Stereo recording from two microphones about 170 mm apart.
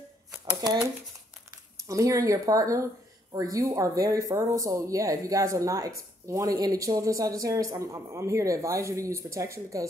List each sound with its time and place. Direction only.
0.5 s speech: 20° right (ahead or behind)
1.9 s speech: 20° right (ahead or behind)